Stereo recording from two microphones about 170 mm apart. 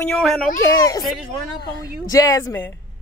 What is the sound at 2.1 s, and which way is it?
Speech, 20° left (ahead or behind).